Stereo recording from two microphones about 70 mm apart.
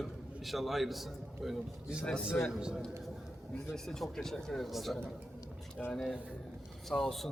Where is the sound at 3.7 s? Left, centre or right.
Centre.